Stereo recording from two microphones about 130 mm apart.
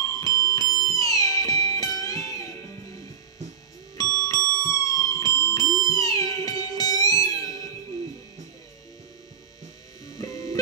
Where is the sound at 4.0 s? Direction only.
25° left (ahead or behind).